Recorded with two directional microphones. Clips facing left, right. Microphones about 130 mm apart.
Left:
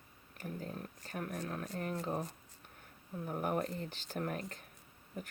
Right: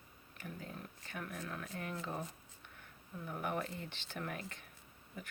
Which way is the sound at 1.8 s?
40° left (ahead or behind).